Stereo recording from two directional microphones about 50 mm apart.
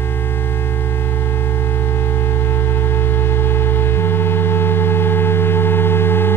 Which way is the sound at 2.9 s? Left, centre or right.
Left.